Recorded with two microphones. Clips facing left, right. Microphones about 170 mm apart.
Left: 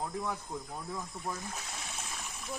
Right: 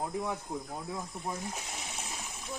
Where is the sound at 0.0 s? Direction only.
20° right (ahead or behind).